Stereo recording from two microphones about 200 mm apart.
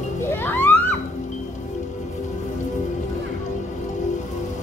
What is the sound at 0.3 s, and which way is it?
Music, 10° left (ahead or behind).